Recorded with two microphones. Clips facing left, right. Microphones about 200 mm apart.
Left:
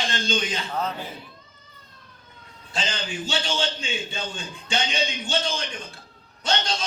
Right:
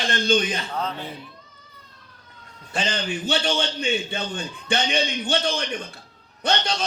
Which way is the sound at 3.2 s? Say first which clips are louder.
Right 3 dB; 60° right (ahead or behind).